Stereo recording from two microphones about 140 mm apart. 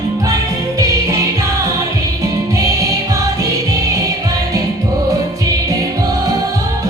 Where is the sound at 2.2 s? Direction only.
25° right (ahead or behind).